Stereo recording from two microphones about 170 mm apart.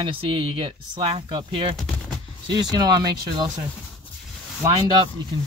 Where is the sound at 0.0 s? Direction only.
30° right (ahead or behind).